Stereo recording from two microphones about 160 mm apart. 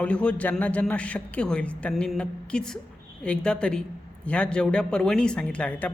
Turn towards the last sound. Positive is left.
turn(degrees=10)  # may be behind; listen again after turning